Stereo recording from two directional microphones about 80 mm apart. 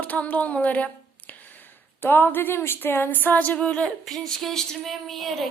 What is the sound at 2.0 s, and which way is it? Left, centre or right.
Speech, left.